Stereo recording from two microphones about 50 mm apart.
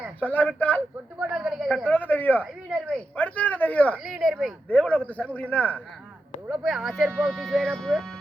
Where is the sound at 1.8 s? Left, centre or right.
Left.